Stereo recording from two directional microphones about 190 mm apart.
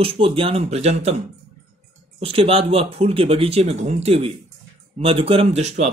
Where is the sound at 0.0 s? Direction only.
30° right (ahead or behind).